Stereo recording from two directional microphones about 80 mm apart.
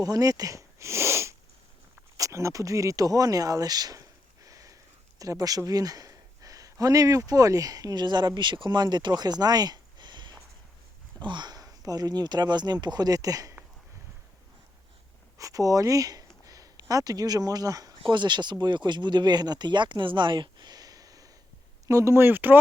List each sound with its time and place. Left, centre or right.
0.0 s speech: right
8.4 s speech: right
15.4 s speech: right
18.0 s speech: right